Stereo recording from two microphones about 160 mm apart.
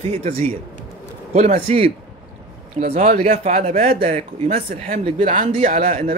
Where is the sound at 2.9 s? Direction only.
45° right (ahead or behind).